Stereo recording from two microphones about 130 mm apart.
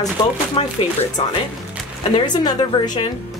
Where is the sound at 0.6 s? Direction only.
40° left (ahead or behind).